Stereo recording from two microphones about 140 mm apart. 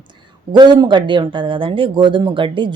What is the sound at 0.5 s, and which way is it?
A woman's voice, 30° right (ahead or behind).